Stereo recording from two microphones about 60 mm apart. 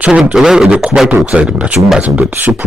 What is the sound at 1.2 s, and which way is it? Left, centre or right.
Speech, centre.